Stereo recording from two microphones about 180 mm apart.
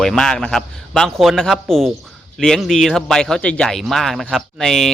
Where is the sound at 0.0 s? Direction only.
5° left (ahead or behind).